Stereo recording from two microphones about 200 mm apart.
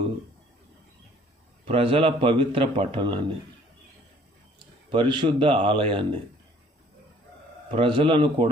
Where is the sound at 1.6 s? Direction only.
25° right (ahead or behind).